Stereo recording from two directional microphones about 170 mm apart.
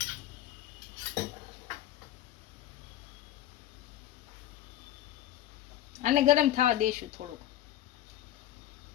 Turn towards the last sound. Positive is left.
turn(degrees=-50)  # may be behind; listen again after turning